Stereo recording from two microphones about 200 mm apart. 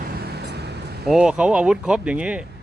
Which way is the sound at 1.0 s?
5° right (ahead or behind).